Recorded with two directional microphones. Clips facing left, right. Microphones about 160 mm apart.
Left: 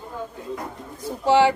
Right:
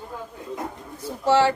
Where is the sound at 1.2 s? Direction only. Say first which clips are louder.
Left 2 dB; 15° left (ahead or behind).